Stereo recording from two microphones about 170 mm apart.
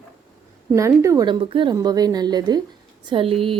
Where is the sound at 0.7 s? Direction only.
15° right (ahead or behind).